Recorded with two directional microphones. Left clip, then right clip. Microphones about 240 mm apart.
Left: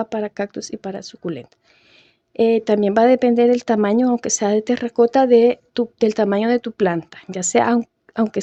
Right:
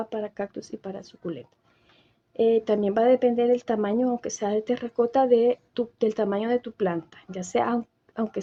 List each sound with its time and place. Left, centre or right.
0.0 s speech: left